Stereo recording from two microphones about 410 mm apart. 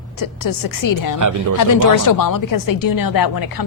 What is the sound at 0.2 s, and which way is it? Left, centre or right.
A woman's voice, left.